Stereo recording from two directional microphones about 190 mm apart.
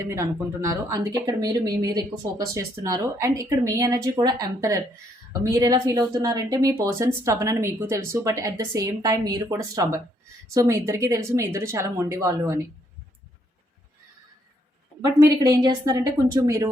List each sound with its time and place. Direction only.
0.0 s speech: 15° right (ahead or behind)
15.4 s speech: 20° right (ahead or behind)